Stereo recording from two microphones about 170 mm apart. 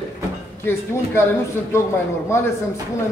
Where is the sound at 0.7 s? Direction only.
15° left (ahead or behind).